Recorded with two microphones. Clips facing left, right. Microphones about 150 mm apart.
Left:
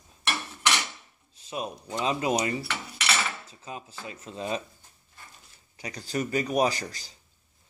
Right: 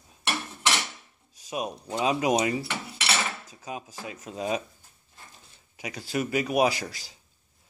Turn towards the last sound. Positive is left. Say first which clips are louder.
# right 2 dB
turn(degrees=-5)  # may be behind; listen again after turning